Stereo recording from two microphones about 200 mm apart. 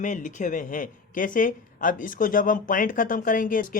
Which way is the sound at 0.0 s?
40° left (ahead or behind).